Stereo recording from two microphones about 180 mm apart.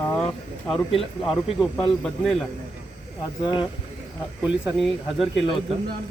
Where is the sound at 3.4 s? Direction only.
25° left (ahead or behind).